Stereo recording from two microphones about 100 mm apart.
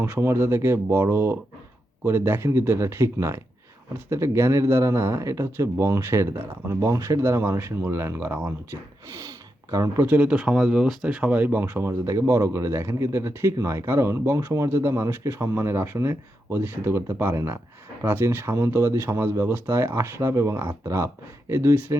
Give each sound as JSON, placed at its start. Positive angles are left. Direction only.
{"t": 0.0, "sound": "speech", "side_deg": -25}
{"t": 6.7, "sound": "speech", "side_deg": -30}
{"t": 10.0, "sound": "speech", "side_deg": -15}